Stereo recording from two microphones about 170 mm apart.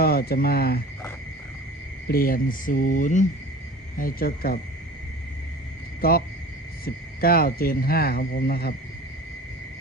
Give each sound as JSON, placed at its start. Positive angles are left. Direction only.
{"t": 0.0, "sound": "speech", "side_deg": 65}
{"t": 2.0, "sound": "speech", "side_deg": 60}
{"t": 6.0, "sound": "speech", "side_deg": 60}